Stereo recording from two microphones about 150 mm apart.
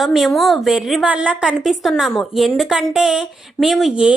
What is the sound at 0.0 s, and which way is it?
A woman's voice, centre (ahead or behind).